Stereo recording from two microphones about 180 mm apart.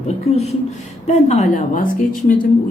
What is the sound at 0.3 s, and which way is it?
A woman's voice, 35° left (ahead or behind).